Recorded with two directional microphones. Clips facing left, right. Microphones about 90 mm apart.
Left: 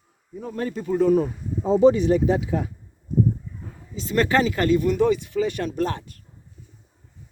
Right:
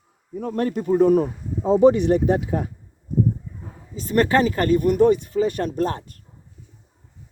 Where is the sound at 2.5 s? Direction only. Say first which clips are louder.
Right 1 dB; 40° right (ahead or behind).